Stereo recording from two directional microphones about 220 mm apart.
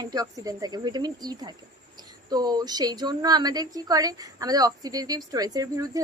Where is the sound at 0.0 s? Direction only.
15° right (ahead or behind).